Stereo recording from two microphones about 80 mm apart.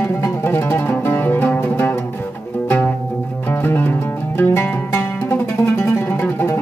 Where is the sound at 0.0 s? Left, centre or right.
Left.